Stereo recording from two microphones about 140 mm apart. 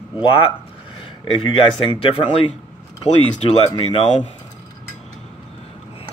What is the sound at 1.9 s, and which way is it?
Speech, 40° left (ahead or behind).